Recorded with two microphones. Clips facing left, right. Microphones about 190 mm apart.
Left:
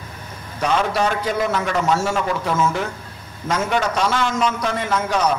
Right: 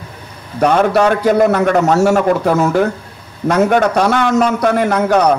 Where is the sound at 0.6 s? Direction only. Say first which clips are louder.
Right 8 dB; 60° right (ahead or behind).